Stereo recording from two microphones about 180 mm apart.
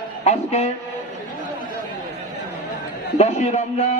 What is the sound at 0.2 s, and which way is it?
Speech, 40° left (ahead or behind).